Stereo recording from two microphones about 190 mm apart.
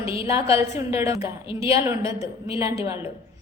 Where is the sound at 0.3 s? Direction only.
30° left (ahead or behind).